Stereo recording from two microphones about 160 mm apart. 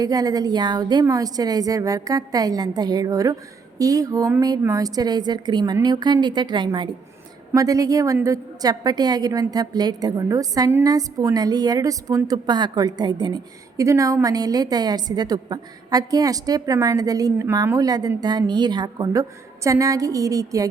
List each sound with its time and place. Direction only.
0.0 s a woman's voice: 25° right (ahead or behind)